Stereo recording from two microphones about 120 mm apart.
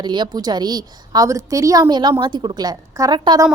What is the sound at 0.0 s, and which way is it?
A woman's voice, 40° right (ahead or behind).